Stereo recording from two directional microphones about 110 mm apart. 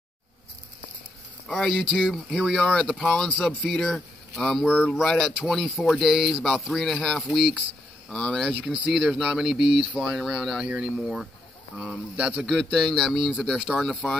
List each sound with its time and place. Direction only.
1.5 s speech: 5° left (ahead or behind)
8.7 s speech: 5° right (ahead or behind)